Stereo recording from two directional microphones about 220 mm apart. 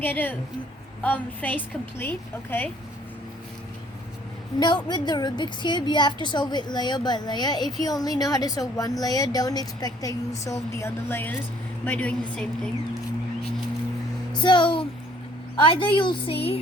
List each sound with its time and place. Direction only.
0.0 s a woman's voice: 10° left (ahead or behind)
4.6 s a woman's voice: 20° left (ahead or behind); by 13.0 s 5° left (ahead or behind)
14.3 s a woman's voice: 20° left (ahead or behind)